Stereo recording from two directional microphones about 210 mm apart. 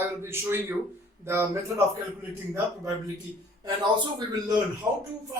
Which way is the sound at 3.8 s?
20° right (ahead or behind).